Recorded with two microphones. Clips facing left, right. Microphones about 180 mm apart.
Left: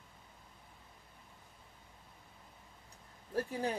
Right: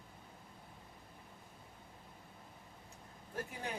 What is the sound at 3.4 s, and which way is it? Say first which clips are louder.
Speech: left 8 dB; 35° left (ahead or behind).